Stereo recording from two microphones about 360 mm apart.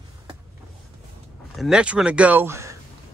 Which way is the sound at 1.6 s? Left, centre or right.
Centre.